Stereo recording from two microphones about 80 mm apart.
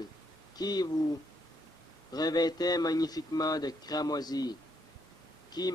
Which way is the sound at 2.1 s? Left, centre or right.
Left.